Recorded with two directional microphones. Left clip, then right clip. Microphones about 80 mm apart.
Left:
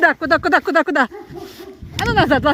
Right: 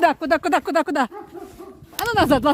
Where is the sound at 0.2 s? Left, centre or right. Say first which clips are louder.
Left 4 dB; right.